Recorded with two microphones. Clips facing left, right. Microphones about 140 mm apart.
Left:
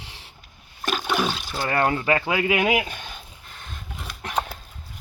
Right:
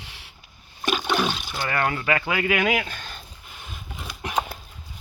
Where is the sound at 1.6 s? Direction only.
30° left (ahead or behind).